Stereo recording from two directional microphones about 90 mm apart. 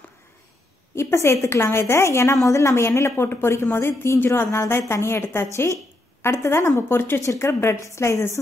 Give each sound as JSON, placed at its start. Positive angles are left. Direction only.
{"t": 0.9, "sound": "a woman's voice", "side_deg": 30}